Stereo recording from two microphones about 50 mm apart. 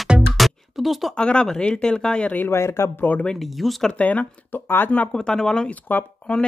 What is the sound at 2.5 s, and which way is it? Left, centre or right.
Speech, left.